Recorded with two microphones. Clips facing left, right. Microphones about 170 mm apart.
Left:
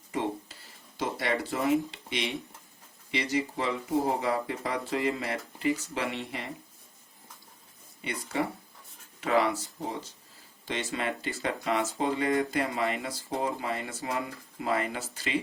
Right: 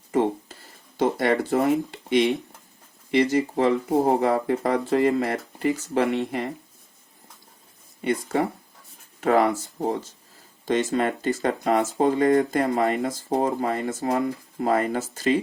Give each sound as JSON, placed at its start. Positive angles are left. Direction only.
{"t": 0.1, "sound": "a sound", "side_deg": -50}
{"t": 0.9, "sound": "speech", "side_deg": -50}
{"t": 8.0, "sound": "speech", "side_deg": -50}